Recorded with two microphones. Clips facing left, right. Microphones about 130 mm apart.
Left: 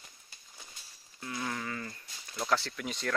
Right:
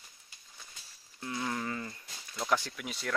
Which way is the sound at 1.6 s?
25° right (ahead or behind).